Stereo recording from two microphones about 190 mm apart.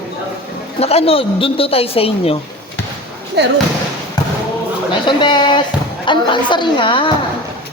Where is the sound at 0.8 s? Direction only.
30° left (ahead or behind).